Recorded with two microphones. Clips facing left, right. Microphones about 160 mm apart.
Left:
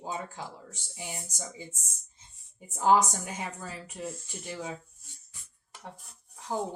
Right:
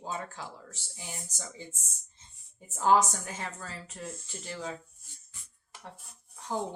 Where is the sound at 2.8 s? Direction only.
15° left (ahead or behind).